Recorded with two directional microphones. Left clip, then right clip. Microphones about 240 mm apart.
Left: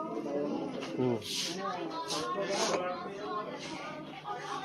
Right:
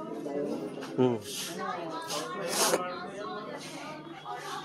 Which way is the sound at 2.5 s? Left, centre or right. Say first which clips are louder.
Right 6 dB; right.